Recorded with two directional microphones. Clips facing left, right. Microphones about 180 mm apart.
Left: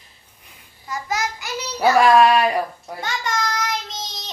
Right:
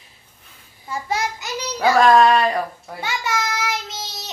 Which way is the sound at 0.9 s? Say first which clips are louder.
Right 1 dB; 30° right (ahead or behind).